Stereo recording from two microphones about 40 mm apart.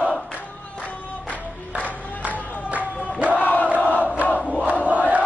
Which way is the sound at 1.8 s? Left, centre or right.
Right.